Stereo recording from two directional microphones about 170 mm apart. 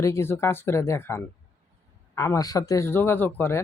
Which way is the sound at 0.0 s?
15° left (ahead or behind).